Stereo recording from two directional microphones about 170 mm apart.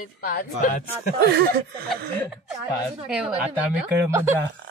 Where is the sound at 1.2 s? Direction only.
70° right (ahead or behind).